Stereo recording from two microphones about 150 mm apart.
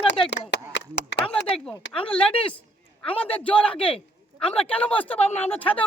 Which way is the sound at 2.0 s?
5° left (ahead or behind).